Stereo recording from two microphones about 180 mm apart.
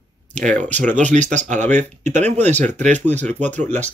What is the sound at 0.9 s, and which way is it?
Speech, 40° right (ahead or behind).